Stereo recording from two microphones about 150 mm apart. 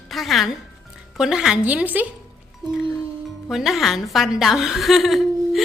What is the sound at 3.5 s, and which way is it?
A woman's voice, centre (ahead or behind).